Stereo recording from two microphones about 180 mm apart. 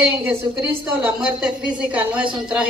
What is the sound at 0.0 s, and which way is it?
A woman's voice, 10° right (ahead or behind).